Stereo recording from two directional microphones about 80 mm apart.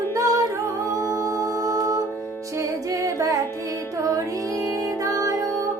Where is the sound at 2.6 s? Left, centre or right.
Right.